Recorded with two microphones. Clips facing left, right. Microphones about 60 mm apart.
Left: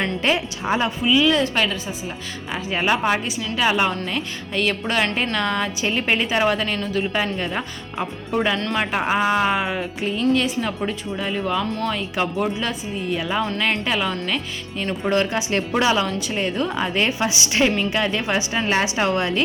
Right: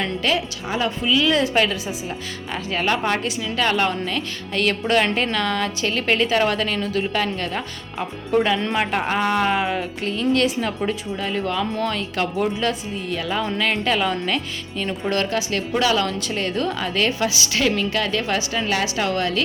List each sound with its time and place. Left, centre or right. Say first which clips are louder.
0.2 s a woman's voice: left 1 dB; left
1.0 s speech: left 1 dB; centre
2.7 s speech: left 1 dB; centre
8.5 s speech: right 1 dB; centre
8.8 s speech: left 1 dB; centre; by 16.0 s left
16.0 s a woman's voice: left 1 dB; centre